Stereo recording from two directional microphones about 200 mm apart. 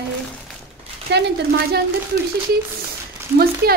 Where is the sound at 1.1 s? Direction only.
55° right (ahead or behind).